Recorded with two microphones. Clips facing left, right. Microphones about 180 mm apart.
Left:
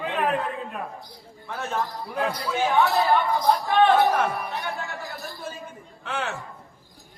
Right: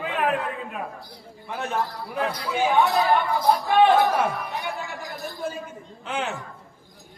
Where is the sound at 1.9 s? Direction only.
10° left (ahead or behind).